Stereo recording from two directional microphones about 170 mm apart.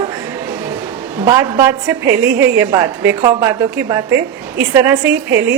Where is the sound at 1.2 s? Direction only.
20° right (ahead or behind).